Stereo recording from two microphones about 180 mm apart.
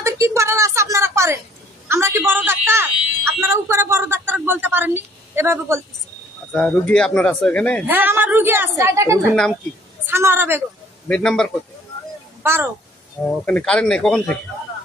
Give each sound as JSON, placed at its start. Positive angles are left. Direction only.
{"t": 0.0, "sound": "a sound", "side_deg": -15}
{"t": 6.5, "sound": "speech", "side_deg": 5}
{"t": 7.8, "sound": "a woman's voice", "side_deg": -10}
{"t": 9.3, "sound": "a man's voice", "side_deg": 0}
{"t": 10.0, "sound": "a woman's voice", "side_deg": -10}
{"t": 11.1, "sound": "a man's voice", "side_deg": 5}
{"t": 13.2, "sound": "a man's voice", "side_deg": 5}